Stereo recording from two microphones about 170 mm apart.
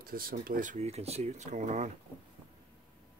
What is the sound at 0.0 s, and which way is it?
Speech, 60° right (ahead or behind).